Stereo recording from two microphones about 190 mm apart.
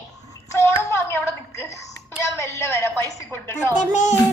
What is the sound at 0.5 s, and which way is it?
A child's voice, 15° left (ahead or behind).